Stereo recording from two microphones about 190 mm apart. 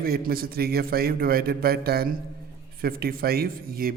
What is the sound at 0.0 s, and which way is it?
A man's voice, 55° right (ahead or behind).